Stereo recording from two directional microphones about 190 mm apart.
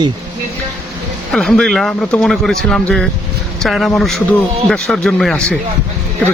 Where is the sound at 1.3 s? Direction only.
5° left (ahead or behind).